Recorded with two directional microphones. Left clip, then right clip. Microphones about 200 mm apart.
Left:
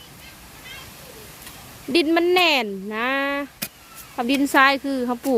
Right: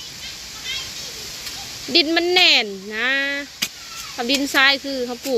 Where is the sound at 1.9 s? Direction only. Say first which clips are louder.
Right 1 dB; 25° left (ahead or behind).